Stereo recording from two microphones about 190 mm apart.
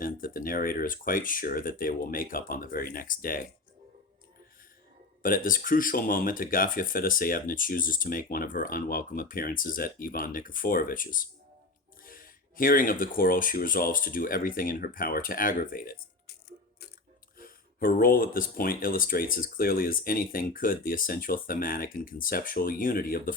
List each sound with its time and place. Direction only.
0.0 s speech: 45° left (ahead or behind)
5.2 s speech: 45° left (ahead or behind)
17.3 s speech: 50° left (ahead or behind)